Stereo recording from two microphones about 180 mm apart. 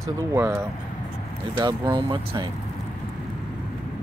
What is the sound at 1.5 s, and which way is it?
Speech, 25° right (ahead or behind).